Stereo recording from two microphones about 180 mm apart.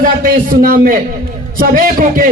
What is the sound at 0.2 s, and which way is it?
A man's voice, 50° right (ahead or behind).